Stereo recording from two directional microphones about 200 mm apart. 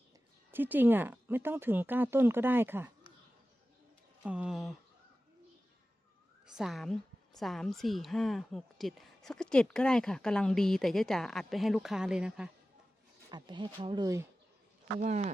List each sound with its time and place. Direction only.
0.5 s speech: 10° right (ahead or behind)
4.2 s a woman's voice: 5° right (ahead or behind)
6.4 s a woman's voice: 5° right (ahead or behind)
13.3 s speech: 25° right (ahead or behind)
15.0 s speech: 35° right (ahead or behind)